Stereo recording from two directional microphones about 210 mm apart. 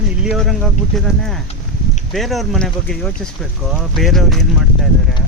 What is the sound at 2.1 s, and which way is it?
Speech, centre (ahead or behind).